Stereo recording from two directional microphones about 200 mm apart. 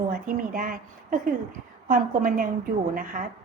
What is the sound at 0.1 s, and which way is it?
A woman's voice, 45° right (ahead or behind).